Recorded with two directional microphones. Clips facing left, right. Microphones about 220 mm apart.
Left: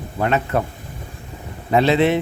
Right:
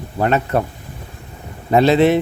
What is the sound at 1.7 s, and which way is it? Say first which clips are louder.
Speech: right 3 dB; 40° right (ahead or behind).